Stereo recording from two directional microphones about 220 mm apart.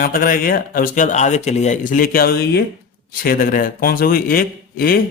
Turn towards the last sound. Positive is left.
turn(degrees=40)  # may be behind; listen again after turning